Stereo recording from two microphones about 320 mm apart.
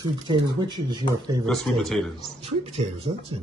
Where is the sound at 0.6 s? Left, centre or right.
Centre.